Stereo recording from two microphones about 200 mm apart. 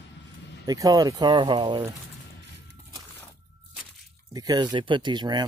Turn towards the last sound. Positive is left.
turn(degrees=-20)  # may be behind; listen again after turning